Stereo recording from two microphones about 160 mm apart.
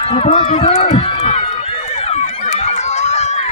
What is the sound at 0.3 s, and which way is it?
Run, 40° left (ahead or behind).